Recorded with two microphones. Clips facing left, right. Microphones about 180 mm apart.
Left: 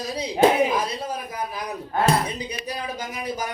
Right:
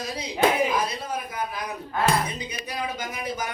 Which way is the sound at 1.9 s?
35° left (ahead or behind).